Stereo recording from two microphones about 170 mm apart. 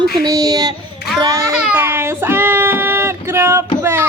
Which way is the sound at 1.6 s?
10° right (ahead or behind).